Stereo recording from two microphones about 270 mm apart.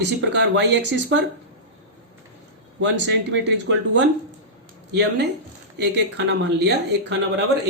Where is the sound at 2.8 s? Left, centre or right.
Right.